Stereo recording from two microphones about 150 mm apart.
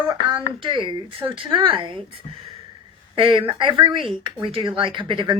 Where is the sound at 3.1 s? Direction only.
35° right (ahead or behind).